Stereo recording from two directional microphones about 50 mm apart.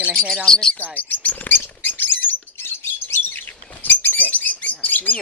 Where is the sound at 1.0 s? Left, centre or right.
Left.